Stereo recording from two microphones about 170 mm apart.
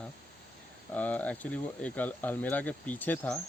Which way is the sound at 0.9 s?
10° left (ahead or behind).